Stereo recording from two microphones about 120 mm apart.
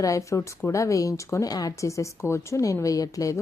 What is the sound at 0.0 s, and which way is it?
Speech, 25° left (ahead or behind).